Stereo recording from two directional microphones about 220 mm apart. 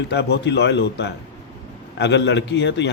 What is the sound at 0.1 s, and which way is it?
Speech, 50° left (ahead or behind).